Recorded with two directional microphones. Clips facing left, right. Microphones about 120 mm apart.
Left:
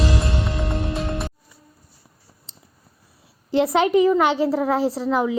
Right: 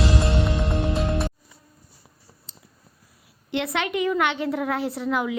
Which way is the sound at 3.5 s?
35° left (ahead or behind).